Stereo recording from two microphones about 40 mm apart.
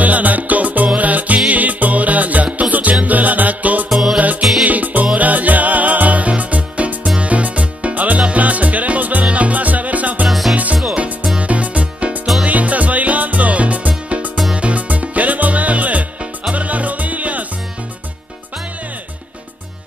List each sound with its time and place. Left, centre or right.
0.0 s music: right
3.9 s music: centre
4.2 s music: right
10.2 s music: centre
10.5 s music: right
14.8 s music: right